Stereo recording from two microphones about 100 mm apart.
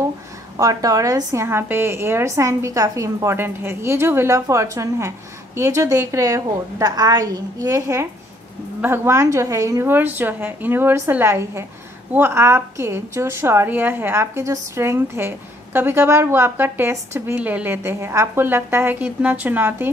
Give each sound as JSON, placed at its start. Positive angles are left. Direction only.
{"t": 0.6, "sound": "a woman's voice", "side_deg": -35}
{"t": 9.9, "sound": "a woman's voice", "side_deg": -20}
{"t": 17.4, "sound": "a woman's voice", "side_deg": -15}